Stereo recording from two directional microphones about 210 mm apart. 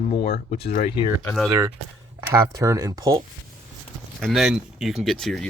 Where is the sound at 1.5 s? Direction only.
15° right (ahead or behind).